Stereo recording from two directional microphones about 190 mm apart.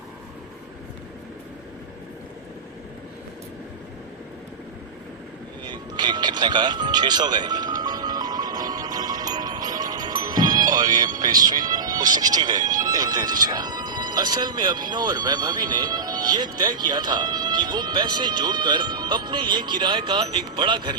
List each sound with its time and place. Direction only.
5.6 s speech: 20° right (ahead or behind)
7.8 s music: 20° right (ahead or behind)